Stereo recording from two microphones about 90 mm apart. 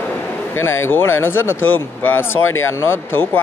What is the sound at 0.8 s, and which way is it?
Speech, 25° left (ahead or behind).